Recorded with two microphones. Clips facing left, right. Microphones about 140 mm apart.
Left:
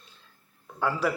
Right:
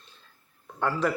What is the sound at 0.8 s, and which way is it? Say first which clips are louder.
Speech: even; 5° left (ahead or behind).